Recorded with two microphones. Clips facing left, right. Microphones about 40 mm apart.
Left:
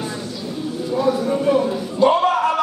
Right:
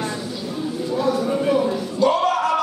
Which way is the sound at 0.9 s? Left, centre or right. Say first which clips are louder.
Left 2 dB; centre.